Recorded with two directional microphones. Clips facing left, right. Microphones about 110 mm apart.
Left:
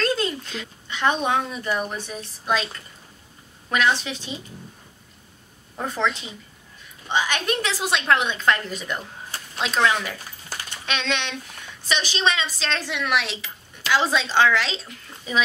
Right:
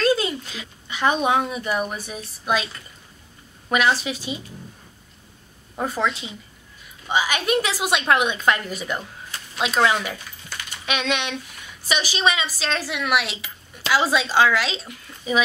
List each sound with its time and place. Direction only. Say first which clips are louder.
0.0 s speech: right 3 dB; 5° right (ahead or behind)
5.8 s speech: right 1 dB; 10° right (ahead or behind)